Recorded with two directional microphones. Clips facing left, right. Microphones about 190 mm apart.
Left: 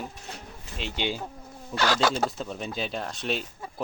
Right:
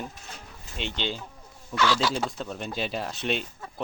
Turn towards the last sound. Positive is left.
turn(degrees=0)  # may be behind; listen again after turning